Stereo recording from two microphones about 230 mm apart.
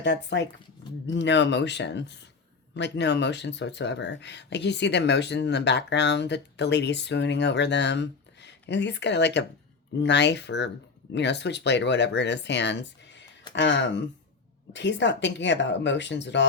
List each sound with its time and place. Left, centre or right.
0.0 s speech: left